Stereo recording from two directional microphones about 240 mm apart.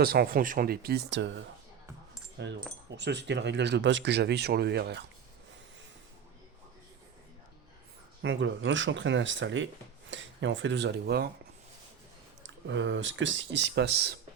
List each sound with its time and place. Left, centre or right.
0.0 s speech: right
2.9 s speech: right
8.2 s speech: right
12.6 s speech: right